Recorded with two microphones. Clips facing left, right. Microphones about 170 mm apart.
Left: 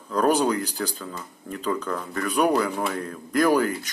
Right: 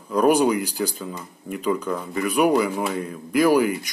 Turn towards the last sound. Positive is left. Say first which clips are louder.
# right 3 dB
turn(degrees=-10)  # may be behind; listen again after turning